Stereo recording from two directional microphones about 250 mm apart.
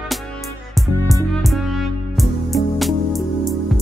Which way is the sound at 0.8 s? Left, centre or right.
Centre.